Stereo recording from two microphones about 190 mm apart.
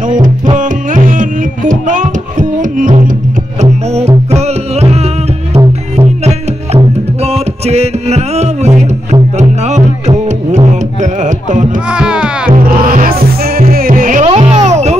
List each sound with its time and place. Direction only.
0.1 s music: 40° right (ahead or behind)
11.9 s music: 5° right (ahead or behind)
12.4 s music: 50° right (ahead or behind)